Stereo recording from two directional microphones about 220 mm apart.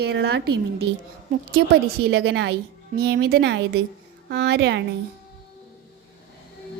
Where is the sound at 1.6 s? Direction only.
55° right (ahead or behind).